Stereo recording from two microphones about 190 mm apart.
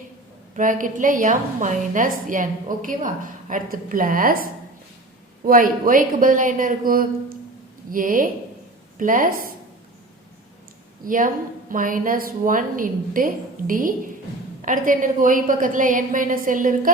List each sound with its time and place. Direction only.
0.5 s a woman's voice: 45° right (ahead or behind)
5.5 s a woman's voice: 50° right (ahead or behind)
11.0 s a woman's voice: 45° right (ahead or behind)